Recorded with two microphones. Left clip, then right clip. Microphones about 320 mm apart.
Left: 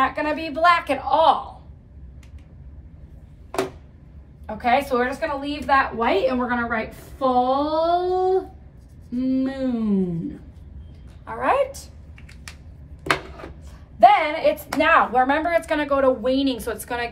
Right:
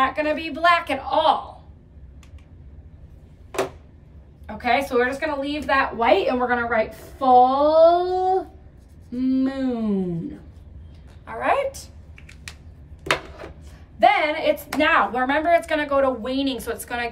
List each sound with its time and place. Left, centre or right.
0.0 s speech: centre
4.5 s a woman's voice: centre
11.2 s speech: centre
13.9 s speech: centre